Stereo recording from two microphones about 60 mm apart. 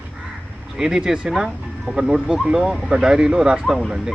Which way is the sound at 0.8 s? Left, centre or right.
Centre.